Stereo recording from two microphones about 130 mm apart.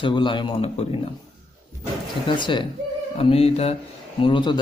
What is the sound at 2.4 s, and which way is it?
Speech, 40° left (ahead or behind).